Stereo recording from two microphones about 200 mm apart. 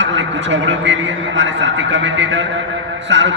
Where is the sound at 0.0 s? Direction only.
65° right (ahead or behind).